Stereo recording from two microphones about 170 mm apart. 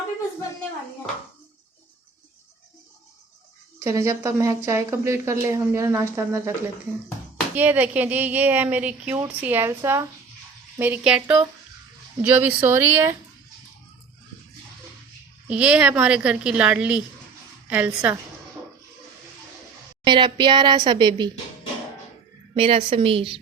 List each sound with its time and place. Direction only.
3.8 s speech: 20° right (ahead or behind)
7.5 s speech: 10° right (ahead or behind)
15.4 s speech: 5° right (ahead or behind)
20.1 s a woman's voice: 30° right (ahead or behind)
22.5 s a woman's voice: 30° right (ahead or behind)